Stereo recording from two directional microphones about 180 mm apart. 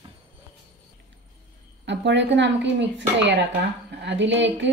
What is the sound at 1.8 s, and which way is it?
Speech, 80° right.